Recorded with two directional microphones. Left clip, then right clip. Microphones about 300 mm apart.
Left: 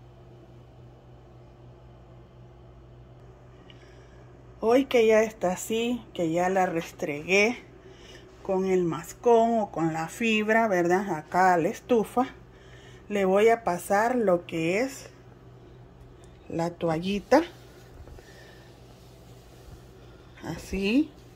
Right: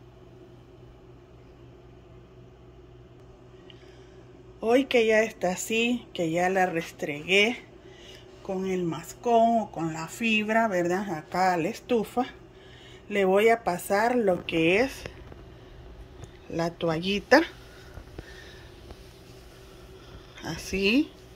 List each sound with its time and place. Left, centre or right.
4.6 s speech: centre
16.4 s speech: centre
20.3 s speech: centre